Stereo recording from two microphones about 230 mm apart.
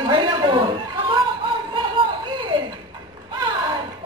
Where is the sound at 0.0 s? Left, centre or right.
Centre.